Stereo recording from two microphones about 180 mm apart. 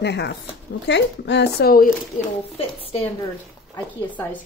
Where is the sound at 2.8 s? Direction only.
30° left (ahead or behind).